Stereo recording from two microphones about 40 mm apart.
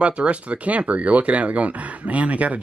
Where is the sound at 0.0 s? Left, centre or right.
Right.